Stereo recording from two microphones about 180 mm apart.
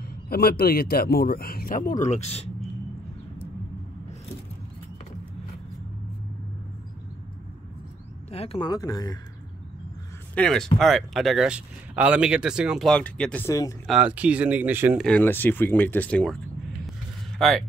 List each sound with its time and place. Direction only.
0.1 s speech: 55° left (ahead or behind); by 2.5 s 35° left (ahead or behind)
8.3 s speech: 35° left (ahead or behind)
10.3 s speech: 5° left (ahead or behind)
13.8 s speech: 5° right (ahead or behind)
15.0 s speech: 5° left (ahead or behind)
17.4 s a man's voice: centre (ahead or behind)